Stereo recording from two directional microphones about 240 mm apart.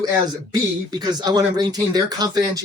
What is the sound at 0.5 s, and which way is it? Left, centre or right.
Speech, centre.